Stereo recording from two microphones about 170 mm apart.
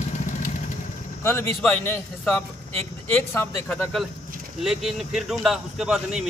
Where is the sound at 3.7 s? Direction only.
5° left (ahead or behind).